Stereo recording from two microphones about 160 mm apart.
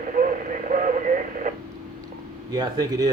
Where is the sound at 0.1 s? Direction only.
55° right (ahead or behind).